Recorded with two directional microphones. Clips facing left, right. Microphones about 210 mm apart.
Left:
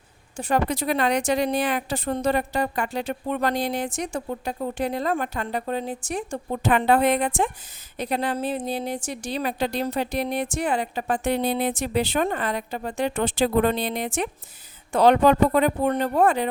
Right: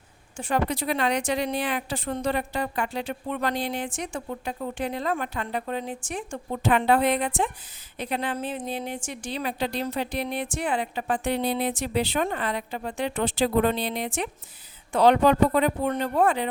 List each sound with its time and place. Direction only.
0.3 s a woman's voice: 40° left (ahead or behind)